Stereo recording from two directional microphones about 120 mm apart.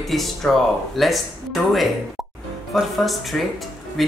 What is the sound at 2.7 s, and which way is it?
Speech, centre (ahead or behind).